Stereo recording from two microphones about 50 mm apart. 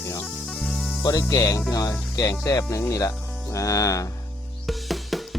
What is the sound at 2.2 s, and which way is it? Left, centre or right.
Speech, left.